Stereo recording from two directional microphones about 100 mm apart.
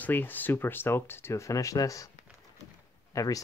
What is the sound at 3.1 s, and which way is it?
Speech, 35° left (ahead or behind).